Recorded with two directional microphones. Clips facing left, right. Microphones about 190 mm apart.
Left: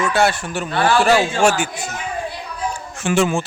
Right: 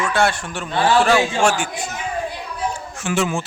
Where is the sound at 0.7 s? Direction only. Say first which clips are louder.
Even; 20° right (ahead or behind).